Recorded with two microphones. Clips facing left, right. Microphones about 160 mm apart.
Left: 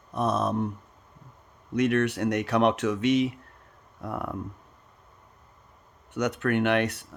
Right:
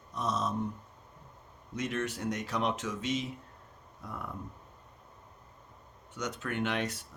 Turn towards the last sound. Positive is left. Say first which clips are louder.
# left 8 dB
turn(degrees=65)  # may be behind; listen again after turning